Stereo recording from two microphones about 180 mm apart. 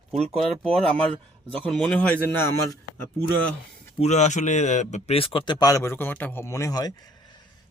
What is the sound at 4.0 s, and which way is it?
A man's voice, 40° left (ahead or behind).